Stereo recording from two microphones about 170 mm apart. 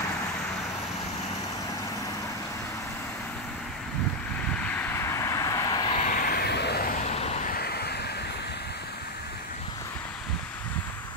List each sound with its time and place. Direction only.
4.6 s vehicle: 10° left (ahead or behind); by 6.0 s 25° left (ahead or behind)
6.0 s vehicle: 55° left (ahead or behind)
7.1 s vehicle: 40° left (ahead or behind)
7.5 s vehicle: 70° left (ahead or behind)